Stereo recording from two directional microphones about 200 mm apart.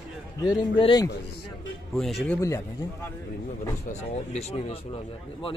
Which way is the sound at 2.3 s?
15° left (ahead or behind).